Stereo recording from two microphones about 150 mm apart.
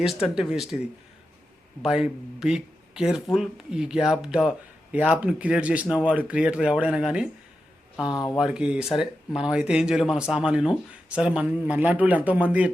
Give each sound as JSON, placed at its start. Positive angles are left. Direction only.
{"t": 0.0, "sound": "speech", "side_deg": -5}
{"t": 1.8, "sound": "a man's voice", "side_deg": -5}
{"t": 8.0, "sound": "speech", "side_deg": 30}
{"t": 8.4, "sound": "a man's voice", "side_deg": -5}